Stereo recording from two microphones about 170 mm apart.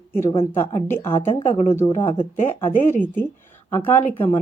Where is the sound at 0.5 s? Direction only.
15° left (ahead or behind).